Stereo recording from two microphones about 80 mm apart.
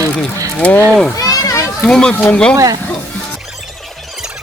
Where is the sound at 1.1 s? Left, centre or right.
Left.